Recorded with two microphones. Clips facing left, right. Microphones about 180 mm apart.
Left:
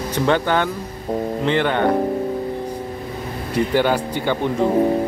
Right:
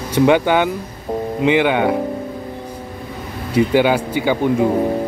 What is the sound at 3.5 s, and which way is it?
Speech, 10° right (ahead or behind).